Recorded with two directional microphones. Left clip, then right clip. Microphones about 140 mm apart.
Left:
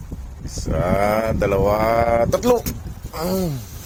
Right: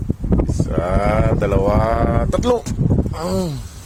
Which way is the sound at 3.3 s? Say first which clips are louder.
Even; 20° right (ahead or behind).